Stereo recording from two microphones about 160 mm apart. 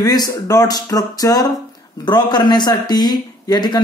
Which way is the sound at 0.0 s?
25° left (ahead or behind).